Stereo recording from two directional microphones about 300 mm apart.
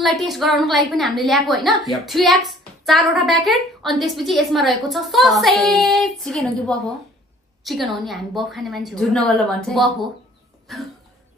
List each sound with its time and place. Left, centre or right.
0.0 s a woman's voice: centre